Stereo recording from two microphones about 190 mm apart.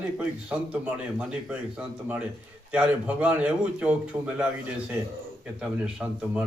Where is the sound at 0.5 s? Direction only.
5° right (ahead or behind).